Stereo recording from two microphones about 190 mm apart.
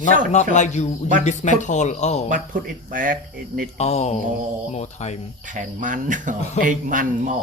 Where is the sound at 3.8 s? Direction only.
35° left (ahead or behind).